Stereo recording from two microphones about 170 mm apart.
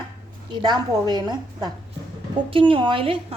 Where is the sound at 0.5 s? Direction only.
25° right (ahead or behind).